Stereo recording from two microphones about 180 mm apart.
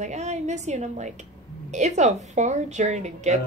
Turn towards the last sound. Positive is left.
turn(degrees=-40)  # may be behind; listen again after turning